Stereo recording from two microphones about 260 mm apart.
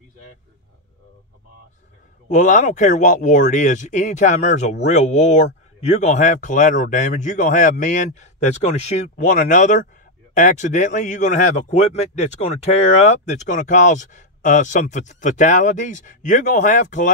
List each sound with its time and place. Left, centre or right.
2.2 s speech: left